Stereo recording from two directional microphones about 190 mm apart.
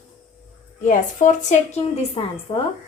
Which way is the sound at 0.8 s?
40° left (ahead or behind).